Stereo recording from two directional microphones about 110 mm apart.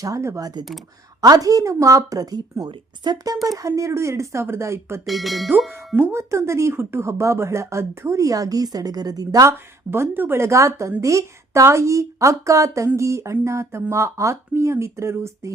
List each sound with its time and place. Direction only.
0.0 s speech: 30° right (ahead or behind)
3.6 s speech: 30° right (ahead or behind)
5.0 s speech: centre (ahead or behind)
6.0 s speech: 25° right (ahead or behind)
9.9 s speech: 20° right (ahead or behind)